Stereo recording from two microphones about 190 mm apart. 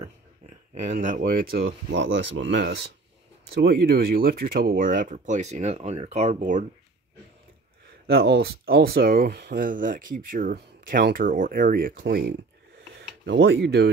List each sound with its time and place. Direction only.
0.5 s speech: 40° right (ahead or behind)
1.7 s speech: 70° right (ahead or behind); by 6.6 s 40° right (ahead or behind)
8.1 s speech: 55° right (ahead or behind)
12.9 s a sound: 60° right (ahead or behind)